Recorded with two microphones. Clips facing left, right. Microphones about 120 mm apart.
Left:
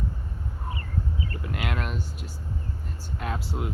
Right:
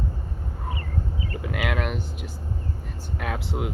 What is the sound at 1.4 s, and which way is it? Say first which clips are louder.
Speech: right 6 dB; 90° right.